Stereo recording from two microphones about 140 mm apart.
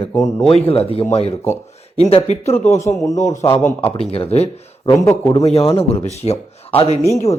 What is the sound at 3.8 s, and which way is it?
Speech, 45° left (ahead or behind).